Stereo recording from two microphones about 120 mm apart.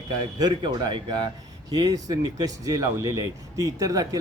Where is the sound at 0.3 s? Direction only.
35° right (ahead or behind).